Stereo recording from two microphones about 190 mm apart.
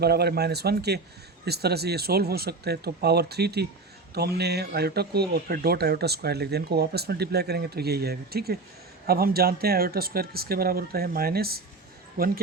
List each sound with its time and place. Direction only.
0.0 s speech: 60° right (ahead or behind)